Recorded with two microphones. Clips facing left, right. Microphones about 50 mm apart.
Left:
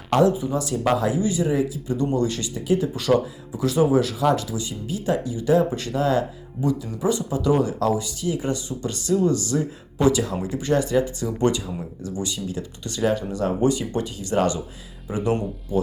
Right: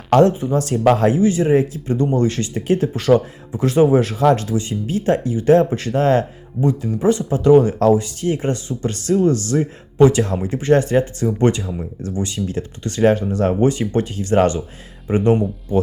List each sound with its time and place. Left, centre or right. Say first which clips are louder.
0.1 s speech: right 5 dB; right